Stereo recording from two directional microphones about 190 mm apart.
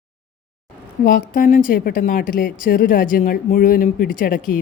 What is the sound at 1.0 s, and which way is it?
A woman's voice, 45° left (ahead or behind).